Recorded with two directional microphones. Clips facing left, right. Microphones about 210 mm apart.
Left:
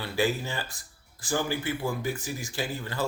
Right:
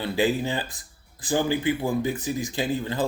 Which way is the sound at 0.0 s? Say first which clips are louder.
Right 4 dB; 20° right (ahead or behind).